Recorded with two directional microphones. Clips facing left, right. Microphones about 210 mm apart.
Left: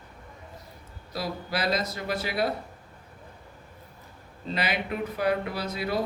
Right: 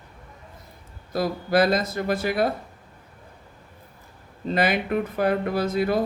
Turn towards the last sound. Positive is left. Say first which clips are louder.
# right 7 dB
turn(degrees=-50)  # may be behind; listen again after turning